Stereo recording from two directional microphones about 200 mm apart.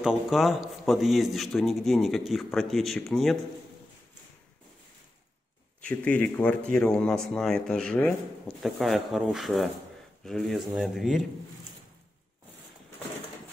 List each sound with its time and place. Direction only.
0.0 s a man's voice: centre (ahead or behind)
5.8 s a man's voice: 5° left (ahead or behind)